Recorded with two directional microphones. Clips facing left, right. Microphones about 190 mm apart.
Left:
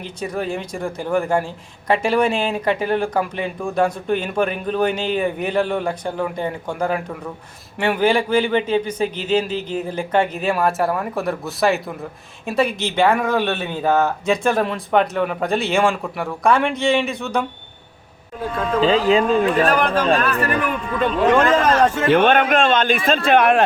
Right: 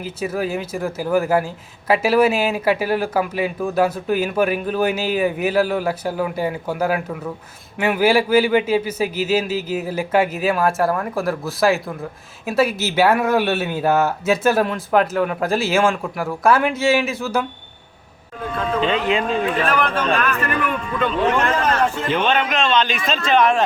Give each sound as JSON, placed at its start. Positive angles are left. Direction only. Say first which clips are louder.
{"t": 0.0, "sound": "speech", "louder": "right 2 dB", "side_deg": -5}
{"t": 18.8, "sound": "a man's voice", "louder": "left 5 dB", "side_deg": 35}
{"t": 22.0, "sound": "a man's voice", "louder": "left 5 dB", "side_deg": 55}